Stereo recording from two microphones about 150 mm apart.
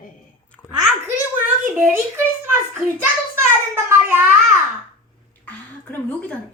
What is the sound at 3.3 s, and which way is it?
Speech, 15° right (ahead or behind).